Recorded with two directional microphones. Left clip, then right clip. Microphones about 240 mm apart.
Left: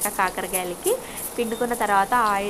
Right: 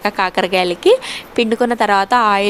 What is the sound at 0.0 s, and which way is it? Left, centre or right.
Speech, right.